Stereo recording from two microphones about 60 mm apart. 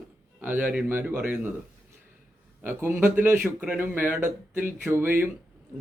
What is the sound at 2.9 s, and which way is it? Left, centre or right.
Speech, right.